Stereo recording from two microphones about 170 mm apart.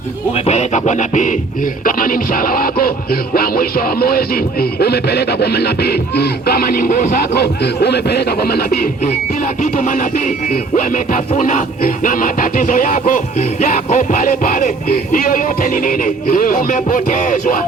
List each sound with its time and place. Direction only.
0.3 s music: 40° left (ahead or behind); by 8.9 s 65° left (ahead or behind)
9.7 s music: 50° left (ahead or behind)